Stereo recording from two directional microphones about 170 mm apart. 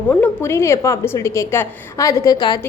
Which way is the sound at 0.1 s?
10° left (ahead or behind).